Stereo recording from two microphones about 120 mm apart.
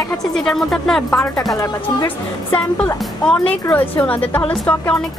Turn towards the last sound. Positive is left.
turn(degrees=15)  # may be behind; listen again after turning